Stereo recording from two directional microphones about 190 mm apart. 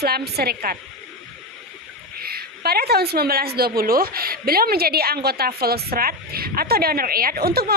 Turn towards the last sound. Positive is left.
turn(degrees=-55)  # may be behind; listen again after turning